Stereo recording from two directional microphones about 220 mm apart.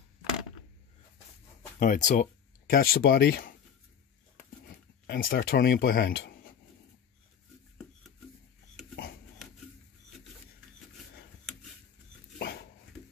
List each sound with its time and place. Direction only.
1.8 s speech: 35° left (ahead or behind)
4.6 s speech: 45° left (ahead or behind)
12.4 s dog: 50° left (ahead or behind)